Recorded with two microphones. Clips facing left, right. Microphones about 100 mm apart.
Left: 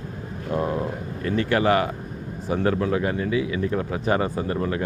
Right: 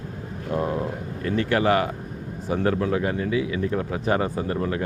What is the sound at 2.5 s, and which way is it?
Speech, 30° left (ahead or behind).